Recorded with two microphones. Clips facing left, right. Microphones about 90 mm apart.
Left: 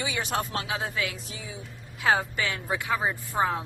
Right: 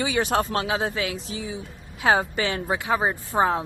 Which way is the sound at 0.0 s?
40° right (ahead or behind).